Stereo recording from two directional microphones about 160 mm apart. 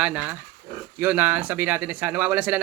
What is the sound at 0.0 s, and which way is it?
Speech, 10° right (ahead or behind).